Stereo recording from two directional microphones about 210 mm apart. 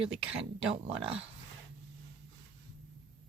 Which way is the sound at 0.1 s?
5° right (ahead or behind).